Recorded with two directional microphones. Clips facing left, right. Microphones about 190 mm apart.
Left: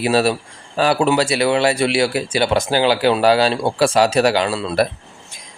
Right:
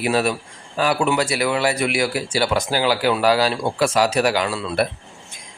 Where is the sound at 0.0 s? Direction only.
30° left (ahead or behind).